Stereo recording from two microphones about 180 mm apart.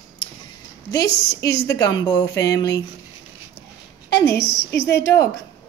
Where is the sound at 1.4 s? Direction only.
20° left (ahead or behind).